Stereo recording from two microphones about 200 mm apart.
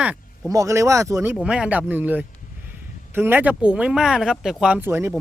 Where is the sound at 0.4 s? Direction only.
15° right (ahead or behind).